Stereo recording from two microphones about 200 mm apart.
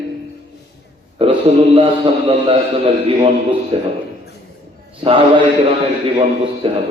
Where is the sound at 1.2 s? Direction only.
30° right (ahead or behind).